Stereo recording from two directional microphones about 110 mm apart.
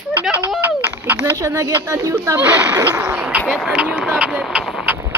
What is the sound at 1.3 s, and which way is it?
Speech, 25° right (ahead or behind).